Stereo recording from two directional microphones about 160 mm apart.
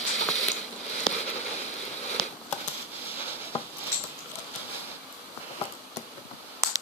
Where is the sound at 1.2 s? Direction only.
45° left (ahead or behind).